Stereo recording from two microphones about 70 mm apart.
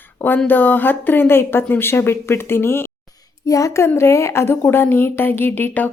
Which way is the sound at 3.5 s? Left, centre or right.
Left.